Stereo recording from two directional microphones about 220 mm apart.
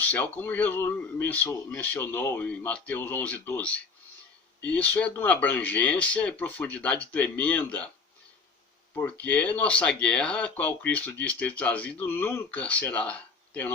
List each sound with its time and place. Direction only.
0.0 s speech: 10° left (ahead or behind)
9.0 s speech: 5° left (ahead or behind)